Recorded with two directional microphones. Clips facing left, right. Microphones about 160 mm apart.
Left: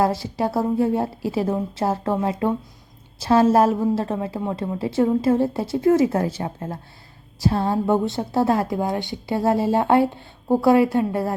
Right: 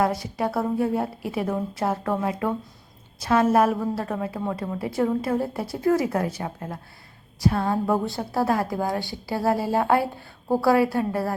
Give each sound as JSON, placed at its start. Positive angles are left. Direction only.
{"t": 0.0, "sound": "a woman's voice", "side_deg": 30}